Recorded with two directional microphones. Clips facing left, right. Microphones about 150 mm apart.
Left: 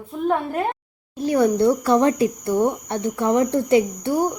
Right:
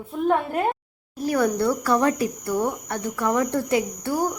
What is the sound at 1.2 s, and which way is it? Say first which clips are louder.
Speech: left 4 dB; 25° left (ahead or behind).